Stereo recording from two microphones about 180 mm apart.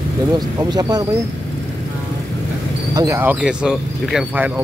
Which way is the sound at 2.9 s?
20° right (ahead or behind).